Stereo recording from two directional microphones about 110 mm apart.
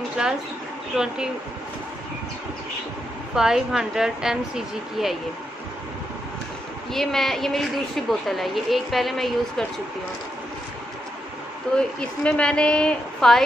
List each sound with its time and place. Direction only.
0.2 s speech: 10° right (ahead or behind)
3.3 s a woman's voice: 5° right (ahead or behind)
6.9 s a woman's voice: 5° left (ahead or behind)
11.7 s a woman's voice: 10° left (ahead or behind)